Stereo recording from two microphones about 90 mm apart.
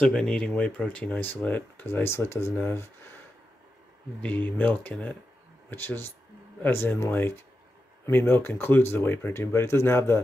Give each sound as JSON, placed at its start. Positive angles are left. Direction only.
{"t": 0.0, "sound": "speech", "side_deg": 5}
{"t": 4.2, "sound": "speech", "side_deg": 20}